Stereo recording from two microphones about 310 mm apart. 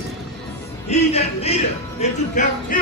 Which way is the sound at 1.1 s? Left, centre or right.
Centre.